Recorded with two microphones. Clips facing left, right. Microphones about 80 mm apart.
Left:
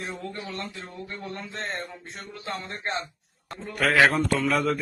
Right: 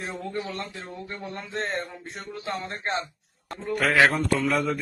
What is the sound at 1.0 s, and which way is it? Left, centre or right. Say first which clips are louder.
A man's voice: left 2 dB; centre.